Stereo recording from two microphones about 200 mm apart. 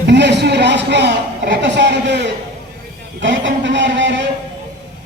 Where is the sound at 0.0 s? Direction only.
60° right (ahead or behind).